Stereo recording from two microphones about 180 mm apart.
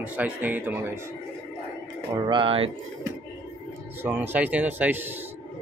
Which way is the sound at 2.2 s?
30° right (ahead or behind).